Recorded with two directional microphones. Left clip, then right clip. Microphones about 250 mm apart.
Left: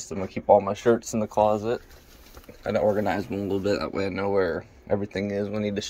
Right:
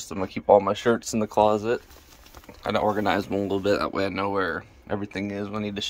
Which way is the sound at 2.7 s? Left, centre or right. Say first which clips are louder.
Even; right.